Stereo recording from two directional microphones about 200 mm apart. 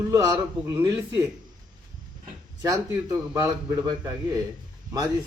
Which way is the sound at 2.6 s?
15° right (ahead or behind).